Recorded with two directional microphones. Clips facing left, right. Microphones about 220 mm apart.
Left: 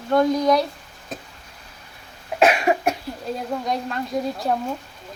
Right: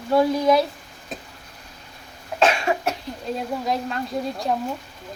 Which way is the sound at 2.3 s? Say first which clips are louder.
Left 3 dB; 10° left (ahead or behind).